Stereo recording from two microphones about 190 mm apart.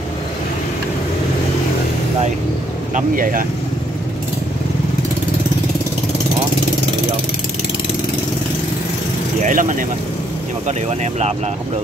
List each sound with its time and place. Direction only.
2.9 s speech: 45° right (ahead or behind)
9.4 s speech: 45° right (ahead or behind)